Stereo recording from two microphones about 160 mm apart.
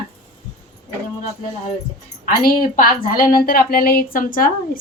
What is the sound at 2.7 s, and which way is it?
A woman's voice, 60° left (ahead or behind).